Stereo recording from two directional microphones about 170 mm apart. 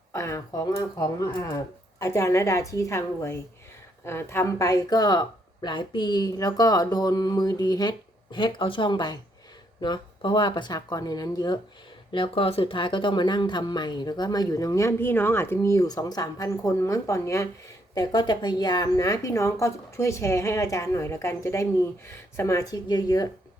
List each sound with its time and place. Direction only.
0.1 s speech: 15° left (ahead or behind)